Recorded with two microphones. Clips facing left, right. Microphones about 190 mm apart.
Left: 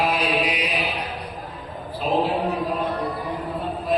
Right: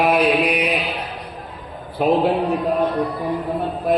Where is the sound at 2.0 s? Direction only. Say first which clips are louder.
Right 5 dB; 60° right (ahead or behind).